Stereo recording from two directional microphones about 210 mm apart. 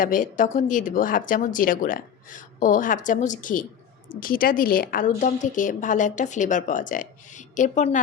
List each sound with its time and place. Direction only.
0.0 s a woman's voice: 40° left (ahead or behind)